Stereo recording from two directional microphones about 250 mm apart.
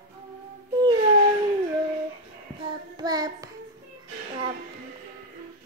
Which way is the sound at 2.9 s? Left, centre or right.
Centre.